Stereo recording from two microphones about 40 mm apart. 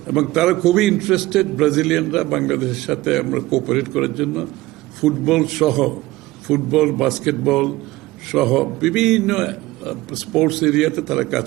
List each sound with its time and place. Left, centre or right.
0.1 s a man's voice: centre